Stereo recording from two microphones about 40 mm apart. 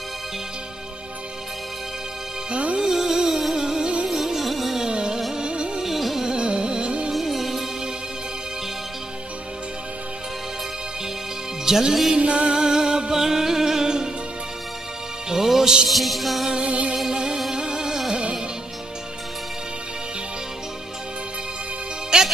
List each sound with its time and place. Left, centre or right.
2.5 s music: right
2.8 s music: centre
4.1 s music: centre
4.8 s music: centre
5.8 s music: centre
6.2 s music: right
7.1 s music: centre
11.6 s music: centre
12.2 s music: right
15.2 s music: centre
15.9 s music: centre
16.4 s music: right
22.1 s music: centre